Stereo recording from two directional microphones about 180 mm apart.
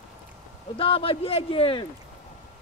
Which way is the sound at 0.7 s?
30° left (ahead or behind).